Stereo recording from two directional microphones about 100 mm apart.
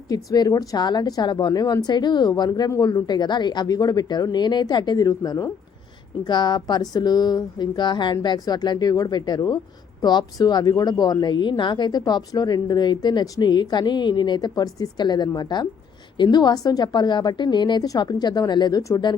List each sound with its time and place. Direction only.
0.1 s a woman's voice: 40° left (ahead or behind)
18.8 s speech: 30° left (ahead or behind)